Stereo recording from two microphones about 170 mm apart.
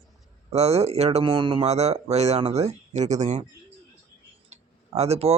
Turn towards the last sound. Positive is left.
turn(degrees=-40)  # may be behind; listen again after turning